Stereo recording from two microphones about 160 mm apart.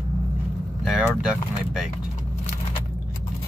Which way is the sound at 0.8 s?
5° right (ahead or behind).